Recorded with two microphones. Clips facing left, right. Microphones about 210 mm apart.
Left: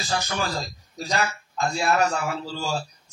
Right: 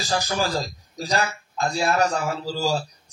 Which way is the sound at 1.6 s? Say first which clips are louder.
Right 1 dB; 35° right (ahead or behind).